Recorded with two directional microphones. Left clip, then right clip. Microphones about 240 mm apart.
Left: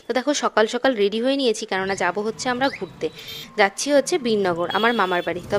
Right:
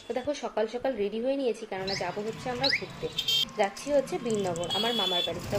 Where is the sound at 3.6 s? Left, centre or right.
Left.